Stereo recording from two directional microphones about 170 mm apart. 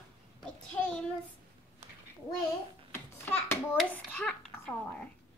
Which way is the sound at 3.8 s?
5° left (ahead or behind).